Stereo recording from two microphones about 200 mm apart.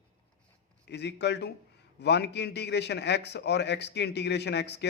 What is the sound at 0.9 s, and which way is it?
A man's voice, 60° left (ahead or behind).